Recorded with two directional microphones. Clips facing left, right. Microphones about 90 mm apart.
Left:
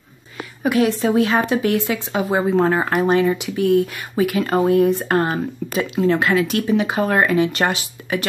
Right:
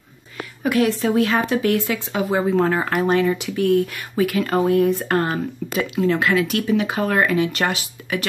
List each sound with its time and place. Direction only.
0.7 s speech: 20° left (ahead or behind)